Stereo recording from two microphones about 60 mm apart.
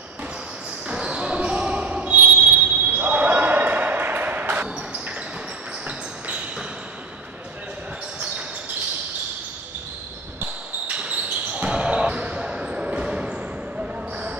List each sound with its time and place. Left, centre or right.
0.8 s basketball bounce: centre
4.6 s basketball bounce: centre
5.9 s a sound: centre
10.9 s basketball bounce: right